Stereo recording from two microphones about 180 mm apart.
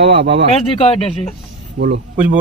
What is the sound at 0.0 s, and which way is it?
Speech, 75° right (ahead or behind).